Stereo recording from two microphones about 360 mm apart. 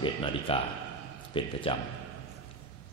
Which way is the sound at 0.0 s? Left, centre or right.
Centre.